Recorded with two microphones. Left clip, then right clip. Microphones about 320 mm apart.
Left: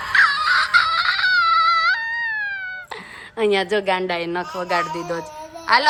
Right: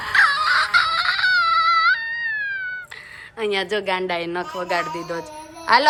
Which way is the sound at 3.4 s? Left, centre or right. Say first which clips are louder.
Left 4 dB; centre.